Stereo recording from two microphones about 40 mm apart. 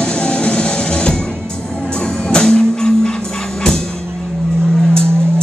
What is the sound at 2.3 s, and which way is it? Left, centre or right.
Music, centre.